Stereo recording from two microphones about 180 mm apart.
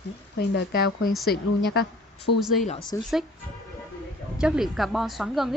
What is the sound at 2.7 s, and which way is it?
Speech, 30° left (ahead or behind).